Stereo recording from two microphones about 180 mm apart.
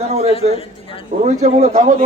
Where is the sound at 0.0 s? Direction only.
35° right (ahead or behind).